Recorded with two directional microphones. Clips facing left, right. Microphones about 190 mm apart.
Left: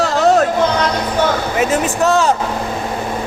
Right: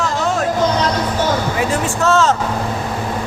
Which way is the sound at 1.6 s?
20° left (ahead or behind).